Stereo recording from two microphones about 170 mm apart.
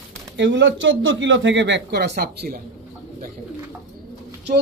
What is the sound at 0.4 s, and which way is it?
Speech, 90° right.